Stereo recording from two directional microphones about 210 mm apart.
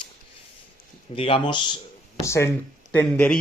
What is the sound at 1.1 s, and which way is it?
Speech, 25° left (ahead or behind).